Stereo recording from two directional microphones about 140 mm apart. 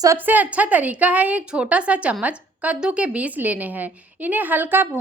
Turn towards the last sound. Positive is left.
turn(degrees=-15)  # may be behind; listen again after turning